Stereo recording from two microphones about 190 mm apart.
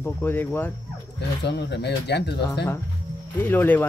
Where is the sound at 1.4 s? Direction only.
60° left (ahead or behind).